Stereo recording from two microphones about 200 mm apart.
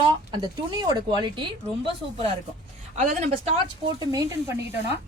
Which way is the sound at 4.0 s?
15° right (ahead or behind).